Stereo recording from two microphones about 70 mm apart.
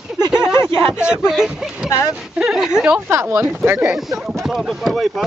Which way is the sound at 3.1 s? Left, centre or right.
Right.